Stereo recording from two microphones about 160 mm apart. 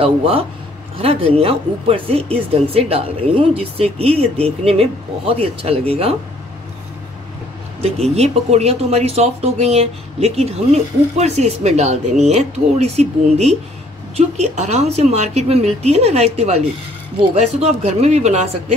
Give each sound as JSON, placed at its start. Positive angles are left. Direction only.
{"t": 0.0, "sound": "speech", "side_deg": -35}
{"t": 7.8, "sound": "speech", "side_deg": -40}